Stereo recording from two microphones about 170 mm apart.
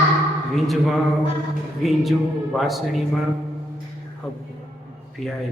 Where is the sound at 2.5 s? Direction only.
Centre (ahead or behind).